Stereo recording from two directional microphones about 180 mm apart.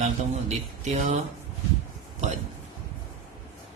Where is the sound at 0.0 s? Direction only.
40° right (ahead or behind).